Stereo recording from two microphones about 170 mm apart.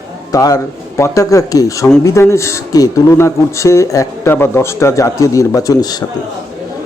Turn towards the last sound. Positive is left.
turn(degrees=20)  # may be behind; listen again after turning